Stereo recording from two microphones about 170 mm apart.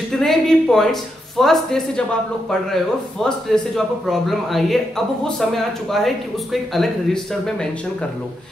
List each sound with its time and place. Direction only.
0.1 s speech: centre (ahead or behind)
3.3 s speech: centre (ahead or behind)